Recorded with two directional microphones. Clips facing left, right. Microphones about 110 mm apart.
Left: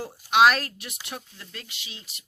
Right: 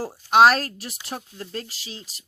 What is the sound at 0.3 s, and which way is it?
Speech, 35° right (ahead or behind).